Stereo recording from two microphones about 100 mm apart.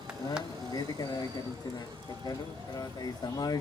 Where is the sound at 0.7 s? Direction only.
40° left (ahead or behind).